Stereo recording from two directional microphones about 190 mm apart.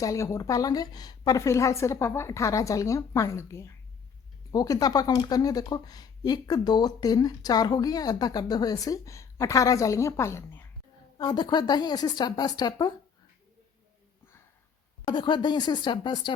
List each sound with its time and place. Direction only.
0.0 s a woman's voice: 15° left (ahead or behind)
15.0 s speech: 25° left (ahead or behind)